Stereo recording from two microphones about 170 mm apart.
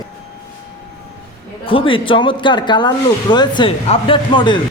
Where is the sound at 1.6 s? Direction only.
30° left (ahead or behind).